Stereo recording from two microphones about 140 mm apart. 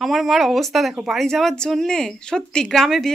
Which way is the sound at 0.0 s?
Centre (ahead or behind).